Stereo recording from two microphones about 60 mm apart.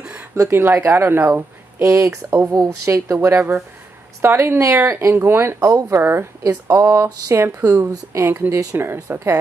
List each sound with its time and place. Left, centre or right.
0.5 s speech: right
1.8 s speech: right
4.2 s speech: right
5.6 s speech: right
6.7 s speech: right
7.6 s speech: right